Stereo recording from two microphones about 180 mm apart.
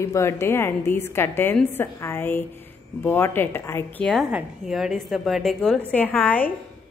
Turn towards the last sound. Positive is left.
turn(degrees=5)  # may be behind; listen again after turning